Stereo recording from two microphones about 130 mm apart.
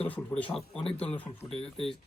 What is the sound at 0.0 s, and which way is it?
Speech, 10° left (ahead or behind).